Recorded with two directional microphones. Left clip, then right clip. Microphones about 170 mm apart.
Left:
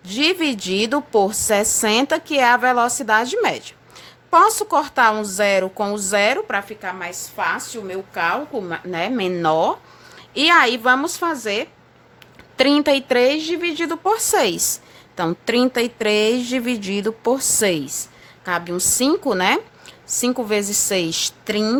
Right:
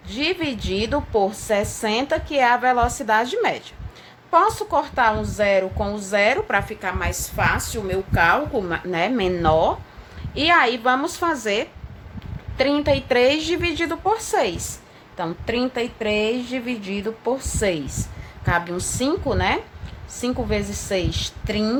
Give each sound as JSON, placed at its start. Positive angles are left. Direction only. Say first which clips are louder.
{"t": 0.1, "sound": "a woman's voice", "louder": "left 5 dB", "side_deg": 40}
{"t": 6.5, "sound": "a woman's voice", "louder": "right 1 dB", "side_deg": 15}
{"t": 6.8, "sound": "a woman's voice", "louder": "right 2 dB", "side_deg": 5}
{"t": 12.5, "sound": "speech", "louder": "left 3 dB", "side_deg": 45}
{"t": 13.1, "sound": "a woman's voice", "louder": "left 1 dB", "side_deg": 25}
{"t": 18.4, "sound": "a woman's voice", "louder": "left 1 dB", "side_deg": 30}